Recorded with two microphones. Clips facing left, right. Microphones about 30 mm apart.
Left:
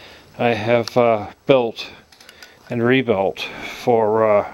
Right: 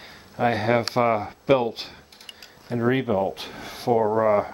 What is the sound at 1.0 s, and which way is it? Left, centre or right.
Speech, left.